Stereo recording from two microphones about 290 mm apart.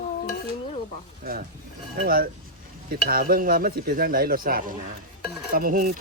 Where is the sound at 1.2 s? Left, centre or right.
Right.